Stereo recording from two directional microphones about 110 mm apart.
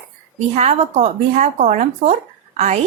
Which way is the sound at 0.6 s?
80° right.